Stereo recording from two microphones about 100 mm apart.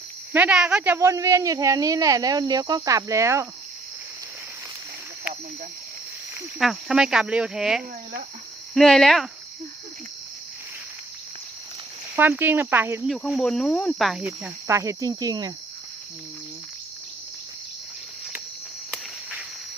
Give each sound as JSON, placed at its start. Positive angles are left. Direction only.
{"t": 0.3, "sound": "speech", "side_deg": -10}
{"t": 0.9, "sound": "speech", "side_deg": -30}
{"t": 6.6, "sound": "speech", "side_deg": -5}
{"t": 12.1, "sound": "speech", "side_deg": -20}
{"t": 13.1, "sound": "speech", "side_deg": 0}
{"t": 14.7, "sound": "speech", "side_deg": -30}